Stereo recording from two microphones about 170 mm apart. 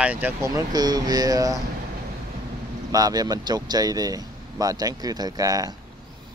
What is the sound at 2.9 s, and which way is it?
Speech, 20° right (ahead or behind).